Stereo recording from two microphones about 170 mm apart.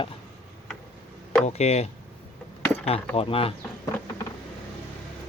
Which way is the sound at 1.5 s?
40° left (ahead or behind).